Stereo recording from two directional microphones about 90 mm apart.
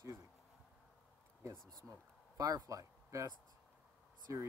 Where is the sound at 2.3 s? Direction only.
45° right (ahead or behind).